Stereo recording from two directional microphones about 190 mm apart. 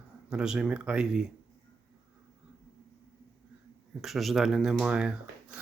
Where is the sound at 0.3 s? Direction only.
5° right (ahead or behind).